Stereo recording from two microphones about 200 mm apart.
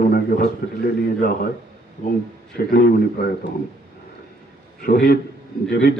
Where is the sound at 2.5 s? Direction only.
50° left (ahead or behind).